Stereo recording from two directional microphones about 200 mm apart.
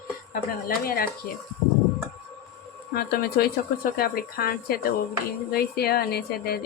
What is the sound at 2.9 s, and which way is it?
A woman's voice, 50° left (ahead or behind).